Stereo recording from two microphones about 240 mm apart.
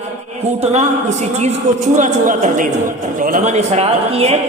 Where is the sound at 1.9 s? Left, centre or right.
Right.